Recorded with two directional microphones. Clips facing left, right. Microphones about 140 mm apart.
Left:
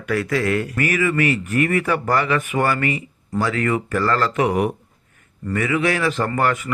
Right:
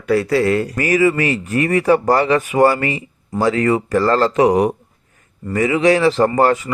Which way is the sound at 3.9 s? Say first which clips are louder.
Right 5 dB; 35° right (ahead or behind).